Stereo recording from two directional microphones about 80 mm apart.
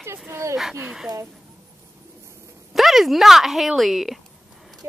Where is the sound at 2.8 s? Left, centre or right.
Centre.